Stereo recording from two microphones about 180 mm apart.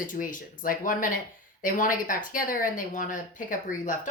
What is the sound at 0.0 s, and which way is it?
Speech, 50° left (ahead or behind).